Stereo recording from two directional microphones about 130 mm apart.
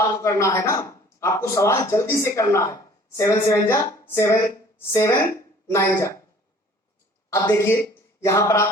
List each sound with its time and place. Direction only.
0.2 s speech: 25° left (ahead or behind)
7.3 s speech: 20° left (ahead or behind)